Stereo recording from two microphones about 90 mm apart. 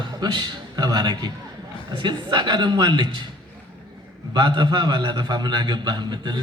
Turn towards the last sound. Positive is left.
turn(degrees=-55)  # may be behind; listen again after turning